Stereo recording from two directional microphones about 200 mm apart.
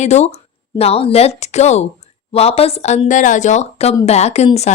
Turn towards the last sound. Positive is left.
turn(degrees=35)  # may be behind; listen again after turning